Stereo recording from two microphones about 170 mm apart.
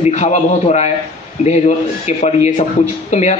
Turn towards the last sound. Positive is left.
turn(degrees=40)  # may be behind; listen again after turning